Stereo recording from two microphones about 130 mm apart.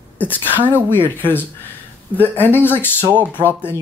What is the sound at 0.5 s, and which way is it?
Speech, 15° right (ahead or behind).